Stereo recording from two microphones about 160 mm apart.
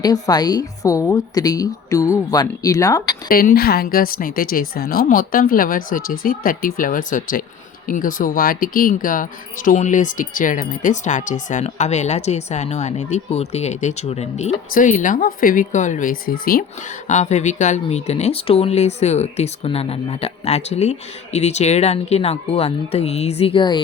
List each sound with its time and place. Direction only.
0.0 s speech: 25° left (ahead or behind)
3.2 s speech: 65° left (ahead or behind); by 14.5 s 40° left (ahead or behind)
14.7 s speech: 55° left (ahead or behind)
17.1 s speech: 45° left (ahead or behind); by 23.8 s 30° left (ahead or behind)